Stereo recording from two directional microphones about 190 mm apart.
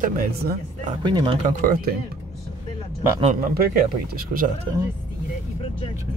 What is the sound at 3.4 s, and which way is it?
Speech, 50° right (ahead or behind).